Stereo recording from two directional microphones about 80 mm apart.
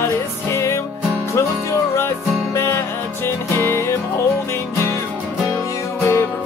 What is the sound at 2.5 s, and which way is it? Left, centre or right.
Music, left.